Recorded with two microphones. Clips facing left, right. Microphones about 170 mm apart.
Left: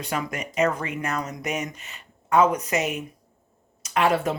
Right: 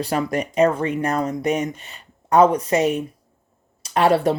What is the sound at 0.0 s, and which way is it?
Speech, 35° right (ahead or behind).